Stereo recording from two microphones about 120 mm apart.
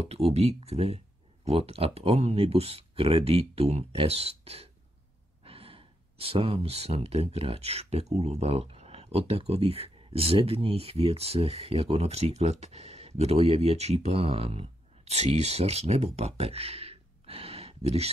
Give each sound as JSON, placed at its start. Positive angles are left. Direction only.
{"t": 0.0, "sound": "speech", "side_deg": -60}